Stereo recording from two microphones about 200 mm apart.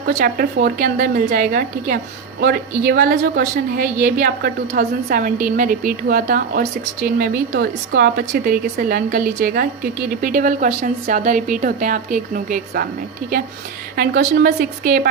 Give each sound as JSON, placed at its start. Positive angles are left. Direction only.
{"t": 0.2, "sound": "a woman's voice", "side_deg": -50}
{"t": 13.9, "sound": "a woman's voice", "side_deg": -50}